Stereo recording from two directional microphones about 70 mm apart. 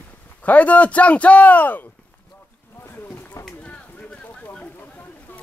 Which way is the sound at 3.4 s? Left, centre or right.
Centre.